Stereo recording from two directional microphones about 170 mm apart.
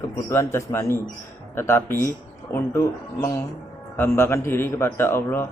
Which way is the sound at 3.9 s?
15° left (ahead or behind).